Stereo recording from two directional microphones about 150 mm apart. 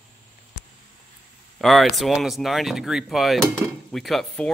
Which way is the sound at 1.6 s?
Centre (ahead or behind).